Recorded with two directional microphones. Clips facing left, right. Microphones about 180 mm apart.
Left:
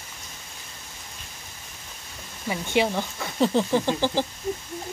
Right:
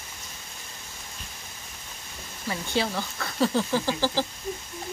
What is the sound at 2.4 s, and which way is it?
Speech, 15° left (ahead or behind).